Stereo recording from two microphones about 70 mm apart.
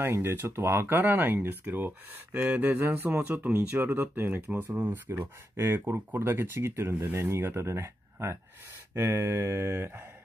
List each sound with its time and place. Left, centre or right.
0.1 s speech: right